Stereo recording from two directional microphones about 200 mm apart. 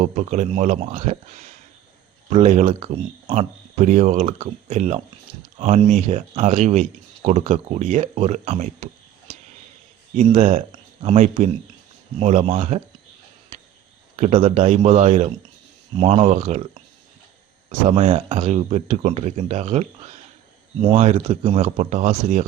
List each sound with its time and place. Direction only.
0.0 s speech: 35° right (ahead or behind)
10.3 s speech: 30° right (ahead or behind)
11.2 s speech: 40° right (ahead or behind)
14.2 s speech: 30° right (ahead or behind)
17.8 s speech: 30° right (ahead or behind)